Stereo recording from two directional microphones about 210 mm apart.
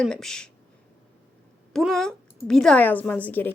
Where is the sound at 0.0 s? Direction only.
5° left (ahead or behind).